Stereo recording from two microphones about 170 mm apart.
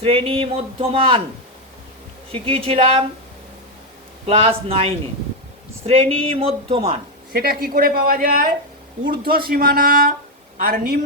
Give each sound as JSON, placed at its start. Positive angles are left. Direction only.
{"t": 0.0, "sound": "speech", "side_deg": -35}
{"t": 2.3, "sound": "speech", "side_deg": -35}
{"t": 4.3, "sound": "speech", "side_deg": -35}
{"t": 7.3, "sound": "speech", "side_deg": -60}